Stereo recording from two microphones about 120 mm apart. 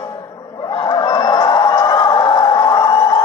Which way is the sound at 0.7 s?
40° left (ahead or behind).